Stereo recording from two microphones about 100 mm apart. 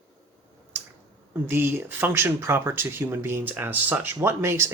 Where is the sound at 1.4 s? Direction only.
20° right (ahead or behind).